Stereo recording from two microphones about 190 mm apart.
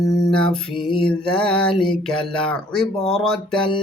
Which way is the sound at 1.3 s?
5° left (ahead or behind).